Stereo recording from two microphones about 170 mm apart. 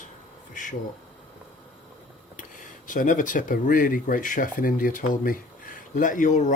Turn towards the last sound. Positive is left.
turn(degrees=45)  # may be behind; listen again after turning